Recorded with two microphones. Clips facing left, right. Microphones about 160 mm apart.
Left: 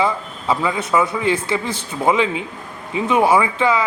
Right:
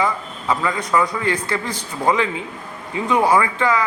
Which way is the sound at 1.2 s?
25° left (ahead or behind).